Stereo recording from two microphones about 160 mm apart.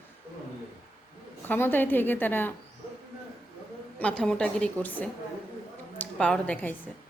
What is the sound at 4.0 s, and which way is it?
A woman's voice, 5° left (ahead or behind).